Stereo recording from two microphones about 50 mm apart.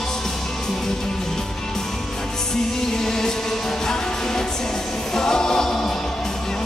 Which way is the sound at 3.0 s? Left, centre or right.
Centre.